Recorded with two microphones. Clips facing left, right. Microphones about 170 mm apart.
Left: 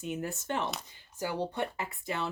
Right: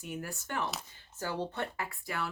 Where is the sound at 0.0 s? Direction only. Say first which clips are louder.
Left 5 dB; 20° left (ahead or behind).